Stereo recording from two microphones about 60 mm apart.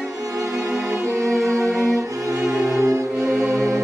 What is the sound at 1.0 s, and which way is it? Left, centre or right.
Music, right.